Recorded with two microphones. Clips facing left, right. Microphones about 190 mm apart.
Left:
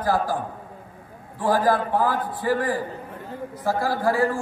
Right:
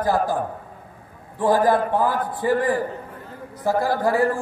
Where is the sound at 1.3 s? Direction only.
20° right (ahead or behind).